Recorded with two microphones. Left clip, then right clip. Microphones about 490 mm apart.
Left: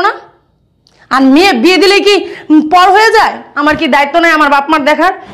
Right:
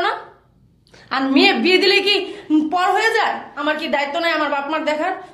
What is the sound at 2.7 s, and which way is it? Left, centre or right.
A woman's voice, left.